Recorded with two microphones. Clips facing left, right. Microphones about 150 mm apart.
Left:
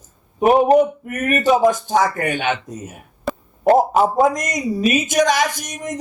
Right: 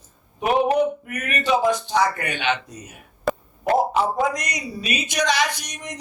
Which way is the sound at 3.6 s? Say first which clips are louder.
Left 6 dB; 45° left (ahead or behind).